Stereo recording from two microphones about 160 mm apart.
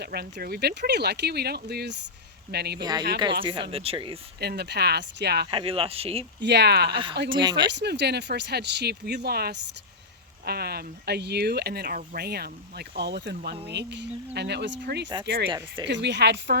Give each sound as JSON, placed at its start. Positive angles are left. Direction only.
{"t": 0.0, "sound": "speech", "side_deg": -85}
{"t": 3.4, "sound": "speech", "side_deg": -35}
{"t": 4.4, "sound": "speech", "side_deg": -90}
{"t": 5.5, "sound": "speech", "side_deg": -35}
{"t": 6.4, "sound": "speech", "side_deg": -90}
{"t": 6.9, "sound": "speech", "side_deg": -30}
{"t": 7.7, "sound": "speech", "side_deg": -90}
{"t": 15.4, "sound": "speech", "side_deg": -30}
{"t": 15.9, "sound": "speech", "side_deg": -90}